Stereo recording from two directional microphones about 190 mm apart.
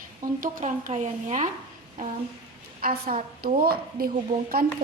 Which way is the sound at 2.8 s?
50° right (ahead or behind).